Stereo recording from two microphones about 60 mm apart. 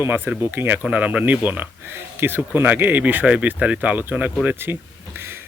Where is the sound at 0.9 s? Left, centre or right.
Right.